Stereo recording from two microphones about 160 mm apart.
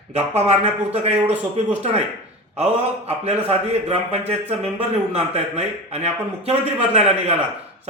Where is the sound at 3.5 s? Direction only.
40° right (ahead or behind).